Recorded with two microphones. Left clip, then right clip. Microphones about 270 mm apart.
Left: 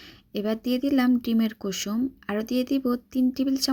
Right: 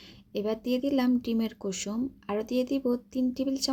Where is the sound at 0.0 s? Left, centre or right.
Left.